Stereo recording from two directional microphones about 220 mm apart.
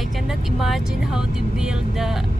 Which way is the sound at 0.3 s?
Centre (ahead or behind).